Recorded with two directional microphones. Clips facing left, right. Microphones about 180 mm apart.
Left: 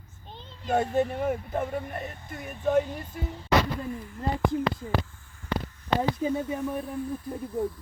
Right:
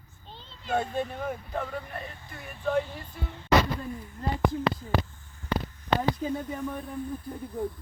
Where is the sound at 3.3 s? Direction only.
10° left (ahead or behind).